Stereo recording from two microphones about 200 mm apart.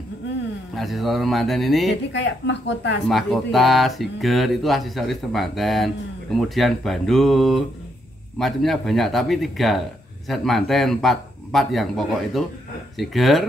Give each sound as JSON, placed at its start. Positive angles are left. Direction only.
{"t": 0.7, "sound": "speech", "side_deg": 0}
{"t": 2.1, "sound": "a woman's voice", "side_deg": 60}
{"t": 3.1, "sound": "speech", "side_deg": 0}